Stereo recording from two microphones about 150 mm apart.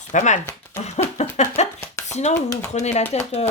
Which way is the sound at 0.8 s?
50° left (ahead or behind).